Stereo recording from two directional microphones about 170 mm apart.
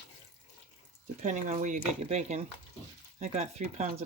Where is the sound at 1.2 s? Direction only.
45° right (ahead or behind).